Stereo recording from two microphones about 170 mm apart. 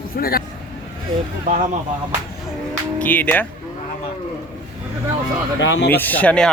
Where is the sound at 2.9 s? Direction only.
10° left (ahead or behind).